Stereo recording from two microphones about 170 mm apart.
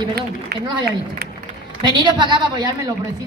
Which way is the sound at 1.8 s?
25° right (ahead or behind).